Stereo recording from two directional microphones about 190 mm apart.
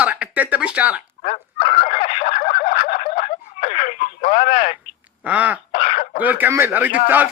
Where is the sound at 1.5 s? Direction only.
30° left (ahead or behind).